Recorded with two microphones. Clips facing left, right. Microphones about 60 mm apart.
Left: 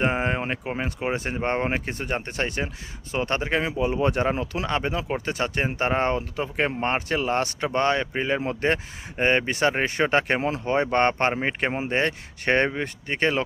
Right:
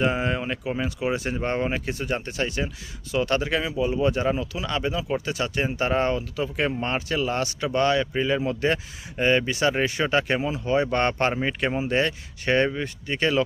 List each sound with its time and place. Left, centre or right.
0.0 s speech: left
3.1 s speech: left